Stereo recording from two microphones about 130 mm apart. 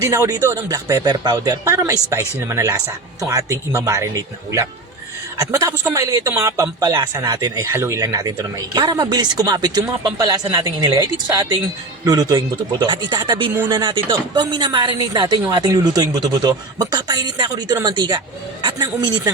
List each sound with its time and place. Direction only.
0.0 s speech: 20° right (ahead or behind)